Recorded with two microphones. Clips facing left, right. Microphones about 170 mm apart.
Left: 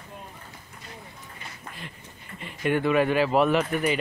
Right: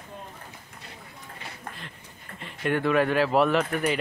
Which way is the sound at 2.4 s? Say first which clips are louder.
Left 1 dB; 5° left (ahead or behind).